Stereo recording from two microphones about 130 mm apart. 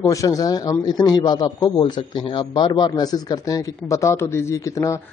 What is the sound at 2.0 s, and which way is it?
A man's voice, 45° left (ahead or behind).